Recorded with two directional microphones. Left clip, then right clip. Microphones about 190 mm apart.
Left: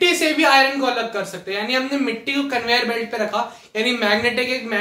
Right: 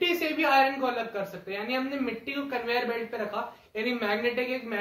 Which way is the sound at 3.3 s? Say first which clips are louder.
Left 10 dB; 15° left (ahead or behind).